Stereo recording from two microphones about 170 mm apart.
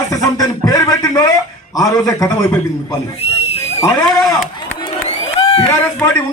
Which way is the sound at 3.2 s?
35° left (ahead or behind).